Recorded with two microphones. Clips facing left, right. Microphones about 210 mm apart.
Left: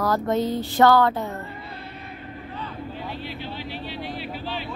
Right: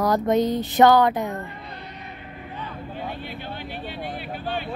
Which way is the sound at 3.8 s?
50° right (ahead or behind).